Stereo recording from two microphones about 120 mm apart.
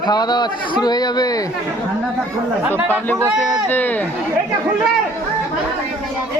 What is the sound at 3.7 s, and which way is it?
Speech, 15° left (ahead or behind).